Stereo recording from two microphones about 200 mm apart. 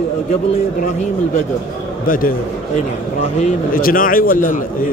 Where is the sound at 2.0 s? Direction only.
45° left (ahead or behind).